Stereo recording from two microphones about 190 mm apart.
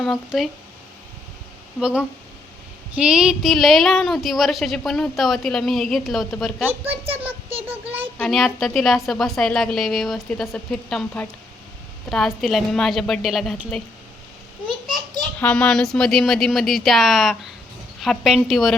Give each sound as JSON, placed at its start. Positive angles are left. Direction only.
{"t": 0.0, "sound": "speech", "side_deg": 0}
{"t": 1.8, "sound": "speech", "side_deg": -5}
{"t": 6.9, "sound": "a child's voice", "side_deg": -30}
{"t": 8.2, "sound": "speech", "side_deg": 0}
{"t": 15.4, "sound": "speech", "side_deg": 5}